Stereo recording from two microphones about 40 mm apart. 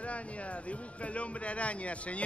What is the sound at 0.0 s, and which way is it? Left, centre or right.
Speech, left.